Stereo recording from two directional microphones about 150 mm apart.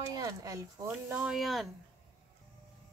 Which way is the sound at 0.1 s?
20° right (ahead or behind).